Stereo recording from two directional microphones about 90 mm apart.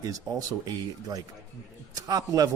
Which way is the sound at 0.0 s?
40° right (ahead or behind).